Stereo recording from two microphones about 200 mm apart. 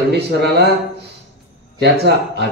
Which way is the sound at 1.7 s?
60° right (ahead or behind).